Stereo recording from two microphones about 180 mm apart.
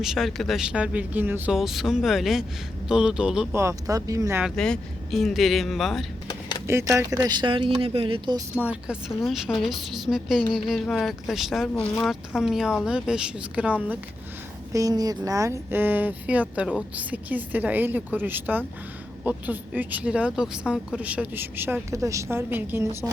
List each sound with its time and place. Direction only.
0.0 s a woman's voice: centre (ahead or behind)
3.5 s speech: 15° right (ahead or behind)
4.4 s a woman's voice: 5° left (ahead or behind)
6.7 s speech: 15° right (ahead or behind)
8.6 s a woman's voice: 5° right (ahead or behind)
14.7 s speech: 20° right (ahead or behind)